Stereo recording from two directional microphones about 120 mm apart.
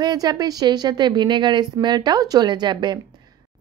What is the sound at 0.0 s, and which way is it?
A woman's voice, 35° right (ahead or behind).